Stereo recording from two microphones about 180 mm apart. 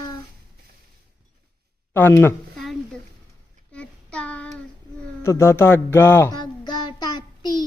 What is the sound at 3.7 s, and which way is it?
Child singing, 5° left (ahead or behind).